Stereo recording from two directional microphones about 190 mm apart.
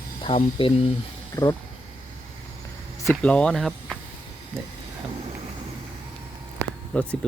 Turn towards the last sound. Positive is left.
turn(degrees=5)  # may be behind; listen again after turning